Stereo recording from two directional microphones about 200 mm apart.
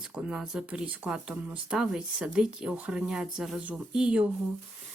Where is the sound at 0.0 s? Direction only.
5° right (ahead or behind).